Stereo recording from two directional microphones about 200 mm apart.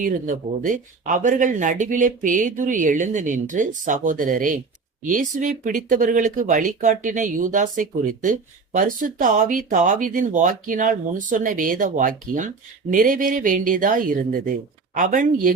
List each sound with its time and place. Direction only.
0.0 s speech: 40° right (ahead or behind)